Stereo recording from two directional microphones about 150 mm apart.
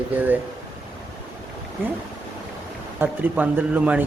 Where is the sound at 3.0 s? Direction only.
10° right (ahead or behind).